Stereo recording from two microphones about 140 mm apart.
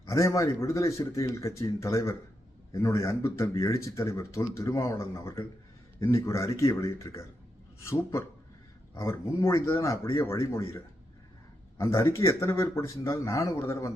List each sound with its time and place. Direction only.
0.1 s speech: 20° left (ahead or behind)
9.0 s speech: 20° left (ahead or behind)